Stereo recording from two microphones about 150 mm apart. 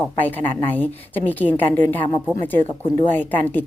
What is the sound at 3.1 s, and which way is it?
Speech, 10° left (ahead or behind).